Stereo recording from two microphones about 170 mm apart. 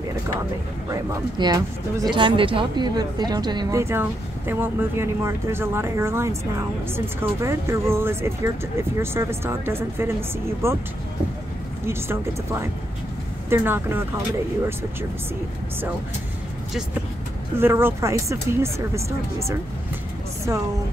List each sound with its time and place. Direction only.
0.8 s speech: 20° right (ahead or behind)
11.8 s speech: 15° right (ahead or behind)
17.6 s speech: 15° right (ahead or behind)